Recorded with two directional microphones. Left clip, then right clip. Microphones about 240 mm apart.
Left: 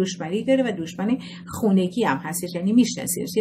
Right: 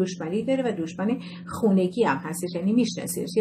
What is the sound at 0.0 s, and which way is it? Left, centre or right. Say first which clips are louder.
Speech: left 2 dB; left.